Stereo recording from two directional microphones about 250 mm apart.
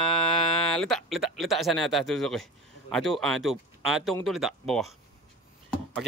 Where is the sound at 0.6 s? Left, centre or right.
Centre.